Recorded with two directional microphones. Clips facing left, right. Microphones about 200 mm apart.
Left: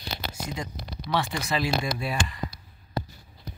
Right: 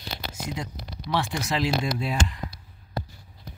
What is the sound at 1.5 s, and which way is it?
Speech, 15° right (ahead or behind).